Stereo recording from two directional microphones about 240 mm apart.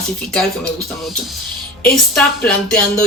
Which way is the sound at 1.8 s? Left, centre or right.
Centre.